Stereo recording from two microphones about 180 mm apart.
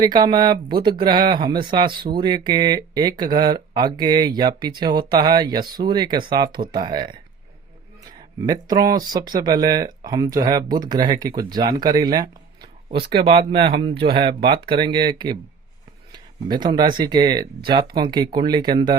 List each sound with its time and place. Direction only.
0.0 s speech: 25° right (ahead or behind)
8.4 s speech: 20° right (ahead or behind)